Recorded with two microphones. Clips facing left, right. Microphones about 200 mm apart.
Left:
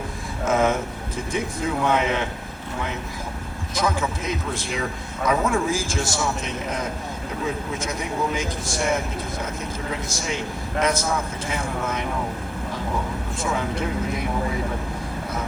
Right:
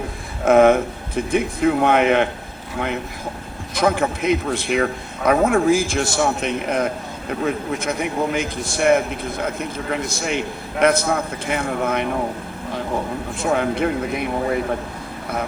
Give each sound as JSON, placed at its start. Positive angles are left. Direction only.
{"t": 0.4, "sound": "speech", "side_deg": -60}
{"t": 3.8, "sound": "speech", "side_deg": -60}
{"t": 13.4, "sound": "speech", "side_deg": -60}